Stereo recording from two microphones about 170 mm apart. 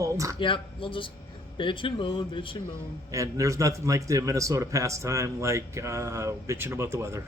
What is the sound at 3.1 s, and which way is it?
A man's voice, 20° right (ahead or behind).